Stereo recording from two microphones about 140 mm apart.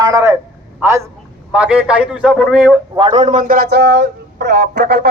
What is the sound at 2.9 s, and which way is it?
Speech, 45° right (ahead or behind).